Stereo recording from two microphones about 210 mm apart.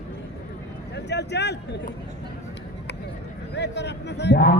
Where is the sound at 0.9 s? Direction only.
55° left (ahead or behind).